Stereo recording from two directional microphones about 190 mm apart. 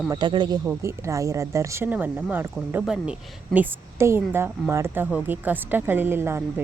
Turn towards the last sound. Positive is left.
turn(degrees=-10)  # may be behind; listen again after turning